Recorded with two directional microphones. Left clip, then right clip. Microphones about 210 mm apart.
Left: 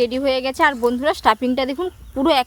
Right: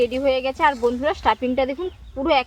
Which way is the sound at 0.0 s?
60° left (ahead or behind).